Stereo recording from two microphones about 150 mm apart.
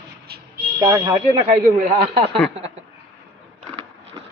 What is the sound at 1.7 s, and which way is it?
Speech, 50° right (ahead or behind).